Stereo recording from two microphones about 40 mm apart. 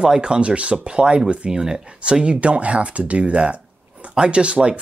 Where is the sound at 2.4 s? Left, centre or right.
Right.